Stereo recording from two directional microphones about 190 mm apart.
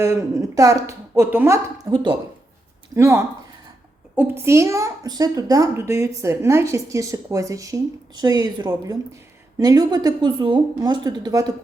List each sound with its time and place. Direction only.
0.0 s a child's voice: 15° right (ahead or behind)